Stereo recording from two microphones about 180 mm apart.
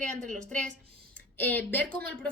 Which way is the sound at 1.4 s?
10° left (ahead or behind).